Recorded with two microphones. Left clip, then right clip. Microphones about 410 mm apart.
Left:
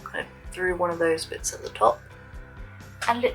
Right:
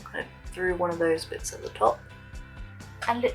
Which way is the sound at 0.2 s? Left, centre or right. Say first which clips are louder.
Left 2 dB; centre.